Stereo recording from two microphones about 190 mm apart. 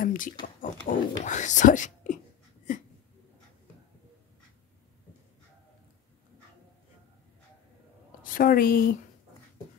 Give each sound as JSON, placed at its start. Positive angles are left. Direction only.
{"t": 0.0, "sound": "a sound", "side_deg": 45}
{"t": 0.6, "sound": "speech", "side_deg": 40}
{"t": 8.2, "sound": "a woman's voice", "side_deg": 45}